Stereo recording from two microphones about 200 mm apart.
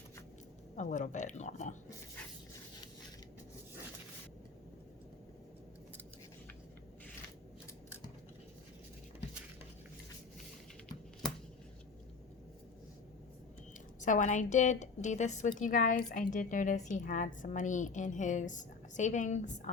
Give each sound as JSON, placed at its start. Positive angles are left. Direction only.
{"t": 0.8, "sound": "a woman's voice", "side_deg": 40}
{"t": 14.0, "sound": "a woman's voice", "side_deg": 40}